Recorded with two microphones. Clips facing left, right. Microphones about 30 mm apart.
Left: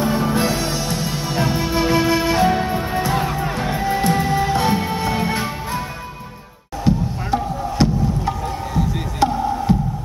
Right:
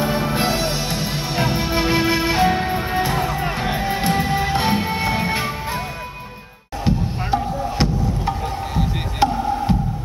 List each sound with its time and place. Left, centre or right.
0.0 s music: right
6.9 s music: right
8.7 s music: right
9.2 s music: right